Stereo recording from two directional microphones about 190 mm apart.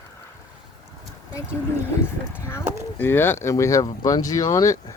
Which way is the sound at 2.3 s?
15° left (ahead or behind).